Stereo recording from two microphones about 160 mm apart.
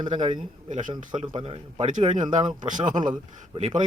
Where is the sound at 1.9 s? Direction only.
50° right (ahead or behind).